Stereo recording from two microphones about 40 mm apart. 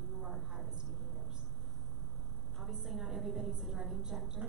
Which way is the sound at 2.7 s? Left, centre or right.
Centre.